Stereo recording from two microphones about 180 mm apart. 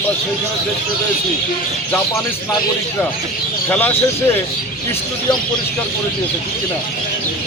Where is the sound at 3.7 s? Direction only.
10° left (ahead or behind).